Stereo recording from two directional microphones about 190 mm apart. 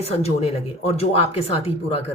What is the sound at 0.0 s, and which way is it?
Speech, 30° left (ahead or behind).